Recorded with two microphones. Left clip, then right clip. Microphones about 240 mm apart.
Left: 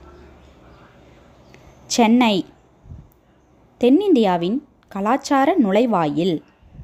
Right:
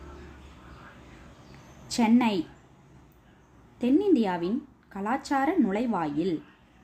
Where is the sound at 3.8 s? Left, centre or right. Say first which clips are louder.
Left 9 dB; left.